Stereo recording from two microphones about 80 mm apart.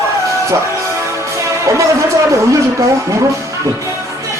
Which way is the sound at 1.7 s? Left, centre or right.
Right.